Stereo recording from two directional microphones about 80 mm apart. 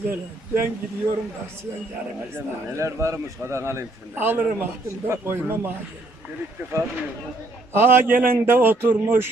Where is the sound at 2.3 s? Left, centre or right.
Right.